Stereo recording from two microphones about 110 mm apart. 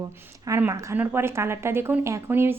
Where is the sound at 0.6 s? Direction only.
20° right (ahead or behind).